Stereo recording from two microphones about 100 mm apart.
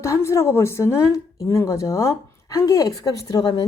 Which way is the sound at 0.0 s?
30° left (ahead or behind).